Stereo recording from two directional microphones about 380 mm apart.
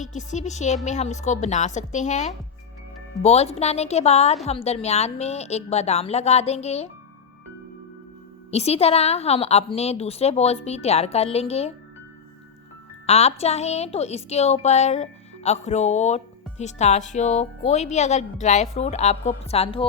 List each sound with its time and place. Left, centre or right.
0.0 s a woman's voice: centre
8.4 s a woman's voice: centre
13.1 s a woman's voice: centre